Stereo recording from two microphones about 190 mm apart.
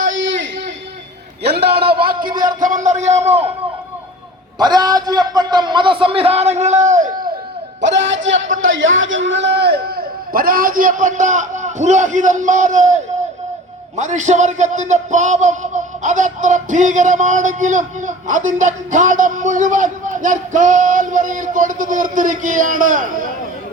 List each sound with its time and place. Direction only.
0.0 s a sound: 80° right
1.5 s a man's voice: 60° right (ahead or behind); by 3.5 s 35° right (ahead or behind)
4.5 s a man's voice: 20° right (ahead or behind); by 7.1 s 40° right (ahead or behind)
7.8 s a man's voice: 75° right (ahead or behind); by 23.3 s 45° right (ahead or behind)